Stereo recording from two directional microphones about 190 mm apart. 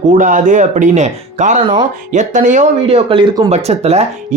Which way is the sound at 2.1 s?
40° right (ahead or behind).